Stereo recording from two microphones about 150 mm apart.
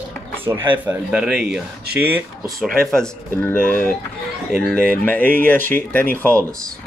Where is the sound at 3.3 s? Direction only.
15° left (ahead or behind).